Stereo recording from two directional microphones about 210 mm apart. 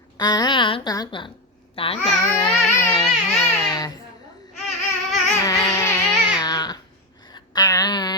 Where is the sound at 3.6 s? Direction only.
20° left (ahead or behind).